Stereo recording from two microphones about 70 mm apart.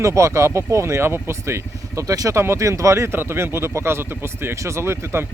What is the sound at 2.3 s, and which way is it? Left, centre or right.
Speech, right.